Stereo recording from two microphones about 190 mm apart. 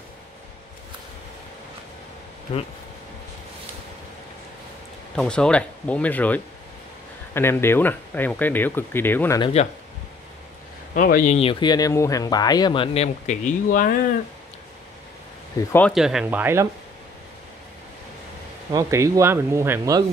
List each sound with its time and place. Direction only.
2.5 s speech: 30° left (ahead or behind)
5.1 s speech: 5° left (ahead or behind)
9.4 s speech: 35° left (ahead or behind)
11.0 s speech: 45° left (ahead or behind)
11.3 s speech: 25° left (ahead or behind); by 13.9 s 45° left (ahead or behind)
15.9 s speech: centre (ahead or behind)
18.7 s speech: 15° right (ahead or behind)